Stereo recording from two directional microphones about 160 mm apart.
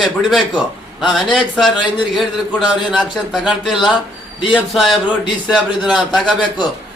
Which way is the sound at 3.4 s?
Centre (ahead or behind).